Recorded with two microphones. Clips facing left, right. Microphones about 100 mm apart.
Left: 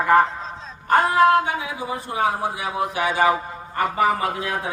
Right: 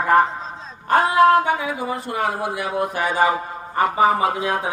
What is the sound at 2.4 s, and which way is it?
Speech, 55° right (ahead or behind).